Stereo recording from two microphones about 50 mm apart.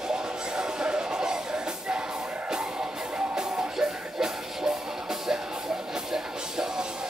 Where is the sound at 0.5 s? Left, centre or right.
Centre.